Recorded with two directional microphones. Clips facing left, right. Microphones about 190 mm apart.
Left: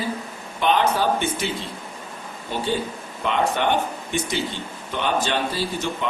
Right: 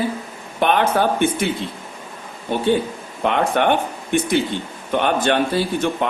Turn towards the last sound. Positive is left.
turn(degrees=-55)  # may be behind; listen again after turning